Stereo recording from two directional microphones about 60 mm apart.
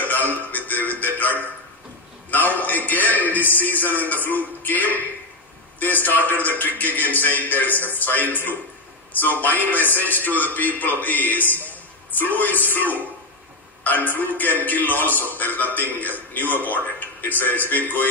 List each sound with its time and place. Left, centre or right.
0.0 s music: left
2.3 s a sound: left
3.5 s a man's voice: left